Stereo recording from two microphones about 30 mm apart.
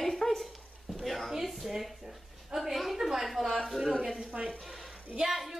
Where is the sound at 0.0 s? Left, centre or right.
Centre.